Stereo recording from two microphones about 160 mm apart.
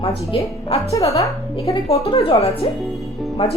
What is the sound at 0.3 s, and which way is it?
Speech, 35° left (ahead or behind).